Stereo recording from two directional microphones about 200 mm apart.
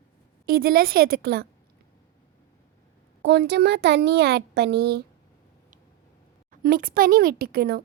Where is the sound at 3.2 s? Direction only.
55° right (ahead or behind).